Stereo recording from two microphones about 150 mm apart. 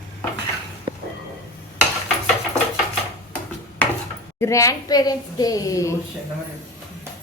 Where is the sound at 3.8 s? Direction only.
10° left (ahead or behind).